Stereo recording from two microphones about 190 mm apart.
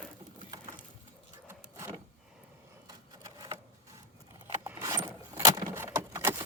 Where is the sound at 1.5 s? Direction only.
15° right (ahead or behind).